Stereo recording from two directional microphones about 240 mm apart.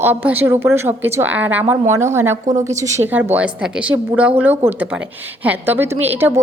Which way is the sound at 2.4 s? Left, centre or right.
Right.